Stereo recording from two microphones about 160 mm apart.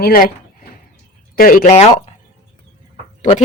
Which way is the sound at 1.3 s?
60° left (ahead or behind).